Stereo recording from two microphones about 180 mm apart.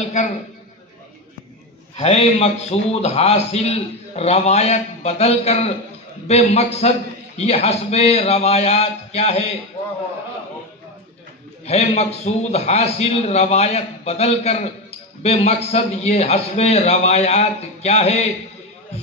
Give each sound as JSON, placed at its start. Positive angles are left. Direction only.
{"t": 2.0, "sound": "a man's voice", "side_deg": 35}
{"t": 11.6, "sound": "a man's voice", "side_deg": 35}